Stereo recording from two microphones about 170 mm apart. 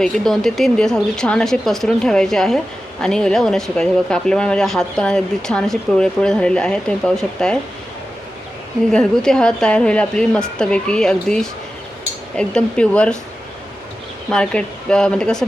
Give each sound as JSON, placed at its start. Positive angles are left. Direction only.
{"t": 0.0, "sound": "speech", "side_deg": 0}
{"t": 8.9, "sound": "speech", "side_deg": 5}
{"t": 14.3, "sound": "speech", "side_deg": 5}